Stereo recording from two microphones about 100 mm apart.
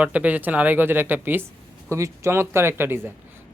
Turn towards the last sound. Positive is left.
turn(degrees=-20)  # may be behind; listen again after turning